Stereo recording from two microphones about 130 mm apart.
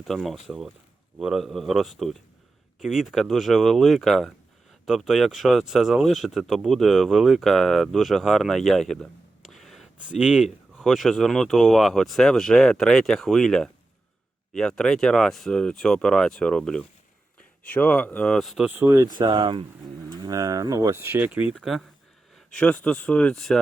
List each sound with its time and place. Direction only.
0.0 s speech: centre (ahead or behind)
18.7 s speech: 20° right (ahead or behind)
19.1 s speech: 35° right (ahead or behind); by 21.5 s 10° right (ahead or behind)
21.5 s speech: centre (ahead or behind)